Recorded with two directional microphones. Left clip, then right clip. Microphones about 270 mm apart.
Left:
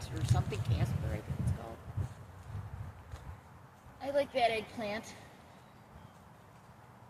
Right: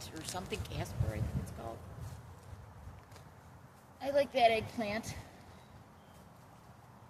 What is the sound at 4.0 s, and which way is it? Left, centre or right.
A woman's voice, right.